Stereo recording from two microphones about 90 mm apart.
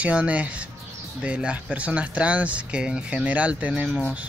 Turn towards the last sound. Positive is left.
turn(degrees=-15)  # may be behind; listen again after turning